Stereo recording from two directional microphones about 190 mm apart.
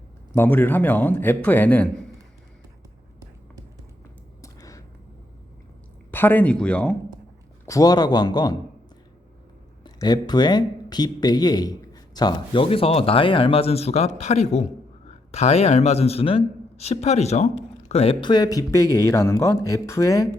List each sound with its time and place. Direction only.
0.3 s speech: 10° left (ahead or behind)
4.4 s a sound: 15° left (ahead or behind)
6.1 s speech: 10° left (ahead or behind)
7.6 s speech: 20° left (ahead or behind)
9.8 s a man's voice: 20° left (ahead or behind)